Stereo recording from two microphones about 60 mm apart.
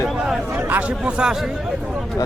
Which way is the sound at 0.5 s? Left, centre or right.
Right.